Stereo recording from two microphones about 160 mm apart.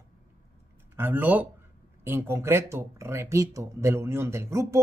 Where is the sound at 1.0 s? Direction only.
10° right (ahead or behind).